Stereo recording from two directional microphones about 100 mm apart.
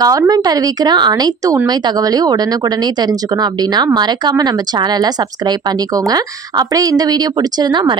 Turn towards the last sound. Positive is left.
turn(degrees=-50)  # may be behind; listen again after turning